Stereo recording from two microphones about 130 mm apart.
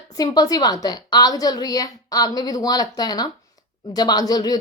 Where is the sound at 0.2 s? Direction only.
30° left (ahead or behind).